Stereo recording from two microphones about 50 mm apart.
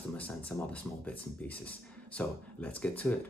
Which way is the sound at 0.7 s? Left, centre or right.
Left.